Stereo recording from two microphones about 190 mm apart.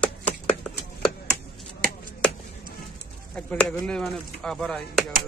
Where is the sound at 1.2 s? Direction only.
50° right (ahead or behind).